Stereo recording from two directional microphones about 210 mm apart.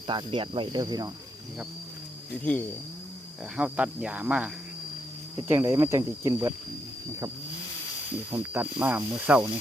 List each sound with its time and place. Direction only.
0.1 s speech: 25° right (ahead or behind)
2.4 s speech: 5° left (ahead or behind)
3.6 s speech: 5° right (ahead or behind)
8.3 s speech: 10° right (ahead or behind)